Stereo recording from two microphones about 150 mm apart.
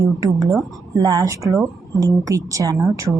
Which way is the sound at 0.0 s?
25° right (ahead or behind).